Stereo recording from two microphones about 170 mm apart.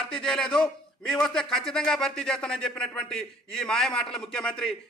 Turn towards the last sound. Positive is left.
turn(degrees=5)  # may be behind; listen again after turning